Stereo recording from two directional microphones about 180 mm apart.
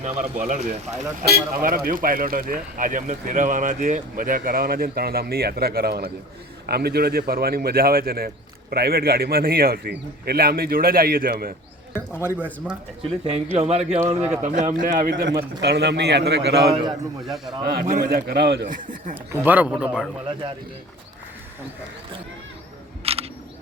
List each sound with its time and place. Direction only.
0.4 s speech: 40° right (ahead or behind)
1.2 s speech: 55° right (ahead or behind)
11.9 s speech: 10° left (ahead or behind)
13.0 s speech: 35° right (ahead or behind)
15.1 s a man's voice: 70° right (ahead or behind)
17.2 s a man's voice: centre (ahead or behind)
17.7 s speech: 60° right (ahead or behind)
18.7 s speech: 50° right (ahead or behind)
19.1 s speech: 10° right (ahead or behind)
23.1 s single-lens reflex camera: 35° right (ahead or behind)